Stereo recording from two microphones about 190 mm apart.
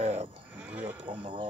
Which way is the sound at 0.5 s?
10° right (ahead or behind).